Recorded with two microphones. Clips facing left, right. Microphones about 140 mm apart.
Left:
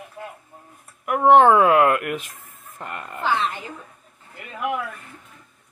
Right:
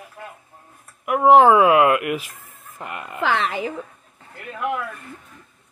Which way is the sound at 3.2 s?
90° right.